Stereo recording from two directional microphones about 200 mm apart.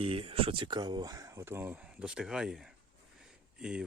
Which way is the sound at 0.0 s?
30° right (ahead or behind).